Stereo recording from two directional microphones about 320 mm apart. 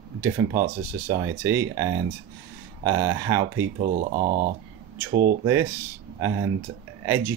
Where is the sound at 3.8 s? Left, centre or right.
Right.